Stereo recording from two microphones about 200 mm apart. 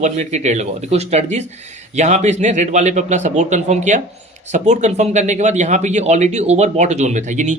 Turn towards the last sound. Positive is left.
turn(degrees=-35)  # may be behind; listen again after turning